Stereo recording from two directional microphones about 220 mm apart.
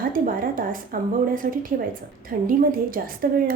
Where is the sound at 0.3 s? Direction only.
40° right (ahead or behind).